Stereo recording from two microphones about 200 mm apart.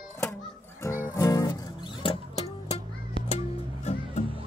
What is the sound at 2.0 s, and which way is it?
Music, 30° left (ahead or behind).